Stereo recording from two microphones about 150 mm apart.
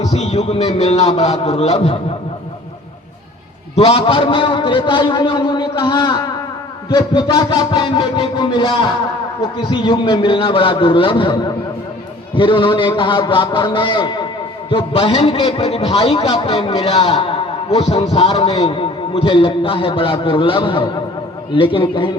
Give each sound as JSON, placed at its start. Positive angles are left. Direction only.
{"t": 0.0, "sound": "a man's voice", "side_deg": 45}
{"t": 3.8, "sound": "a man's voice", "side_deg": 40}
{"t": 6.9, "sound": "music", "side_deg": 30}
{"t": 9.6, "sound": "a man's voice", "side_deg": 35}